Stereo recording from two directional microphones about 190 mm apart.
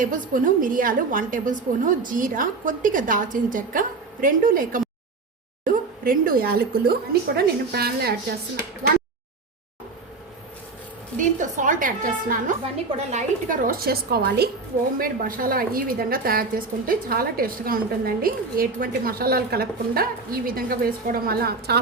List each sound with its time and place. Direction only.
0.0 s a woman's voice: 45° right (ahead or behind)
11.2 s a woman's voice: 40° right (ahead or behind)